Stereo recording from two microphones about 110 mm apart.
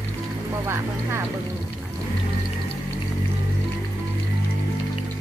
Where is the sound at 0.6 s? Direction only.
25° right (ahead or behind).